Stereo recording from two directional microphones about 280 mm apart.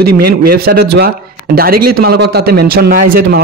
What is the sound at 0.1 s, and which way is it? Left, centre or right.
Speech, right.